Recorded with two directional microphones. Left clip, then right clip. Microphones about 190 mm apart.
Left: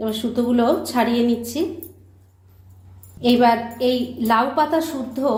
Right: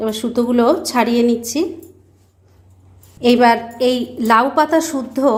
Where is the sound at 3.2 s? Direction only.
40° right (ahead or behind).